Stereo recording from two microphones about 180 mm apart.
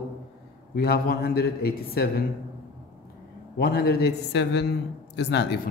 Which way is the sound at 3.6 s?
55° left (ahead or behind).